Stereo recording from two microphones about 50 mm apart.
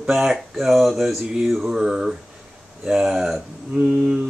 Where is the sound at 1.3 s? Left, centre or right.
Centre.